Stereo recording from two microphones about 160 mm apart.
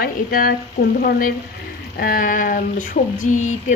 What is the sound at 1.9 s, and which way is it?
Speech, 65° left (ahead or behind).